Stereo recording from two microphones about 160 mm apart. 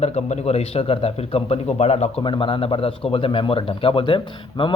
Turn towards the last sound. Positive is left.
turn(degrees=30)  # may be behind; listen again after turning